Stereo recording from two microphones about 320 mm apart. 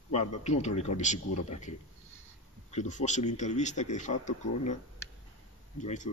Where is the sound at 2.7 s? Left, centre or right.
Left.